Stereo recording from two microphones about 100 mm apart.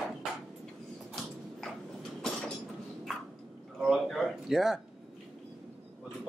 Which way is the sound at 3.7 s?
5° right (ahead or behind).